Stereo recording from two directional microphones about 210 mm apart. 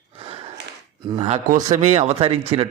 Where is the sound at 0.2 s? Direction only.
25° right (ahead or behind).